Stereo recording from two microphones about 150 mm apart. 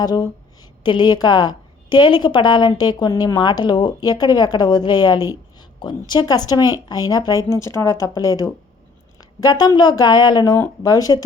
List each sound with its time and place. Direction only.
0.0 s a woman's voice: 25° left (ahead or behind)